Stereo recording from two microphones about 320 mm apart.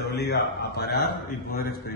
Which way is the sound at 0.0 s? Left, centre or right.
Left.